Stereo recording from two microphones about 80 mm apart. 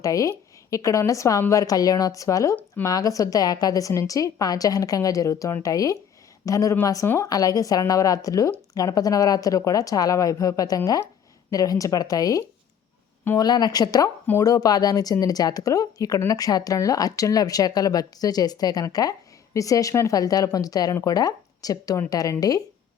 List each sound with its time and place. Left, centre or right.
0.0 s speech: left
13.3 s speech: left